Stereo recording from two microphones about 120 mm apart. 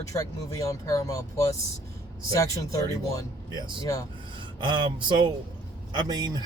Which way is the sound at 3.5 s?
40° right (ahead or behind).